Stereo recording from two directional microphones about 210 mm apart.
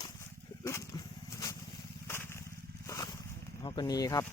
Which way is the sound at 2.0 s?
10° left (ahead or behind).